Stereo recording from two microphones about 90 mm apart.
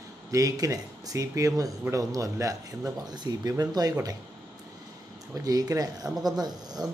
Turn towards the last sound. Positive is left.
turn(degrees=-50)  # may be behind; listen again after turning